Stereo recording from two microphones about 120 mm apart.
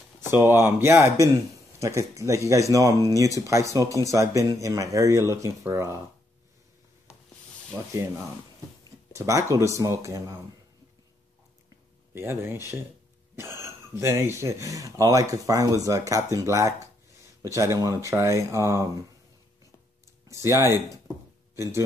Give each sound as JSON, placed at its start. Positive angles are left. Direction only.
{"t": 0.2, "sound": "speech", "side_deg": -20}
{"t": 7.7, "sound": "speech", "side_deg": -20}
{"t": 12.1, "sound": "speech", "side_deg": -20}
{"t": 20.2, "sound": "speech", "side_deg": -25}